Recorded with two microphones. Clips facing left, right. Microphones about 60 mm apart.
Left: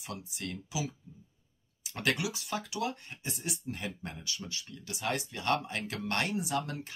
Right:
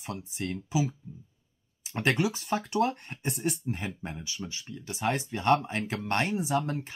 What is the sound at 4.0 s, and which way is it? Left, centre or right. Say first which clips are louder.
Speech: right 3 dB; right.